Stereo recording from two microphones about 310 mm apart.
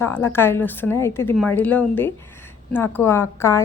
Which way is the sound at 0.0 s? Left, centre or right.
Centre.